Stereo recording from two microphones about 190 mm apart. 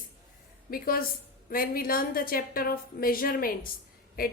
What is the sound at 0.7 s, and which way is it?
A woman's voice, 50° left (ahead or behind).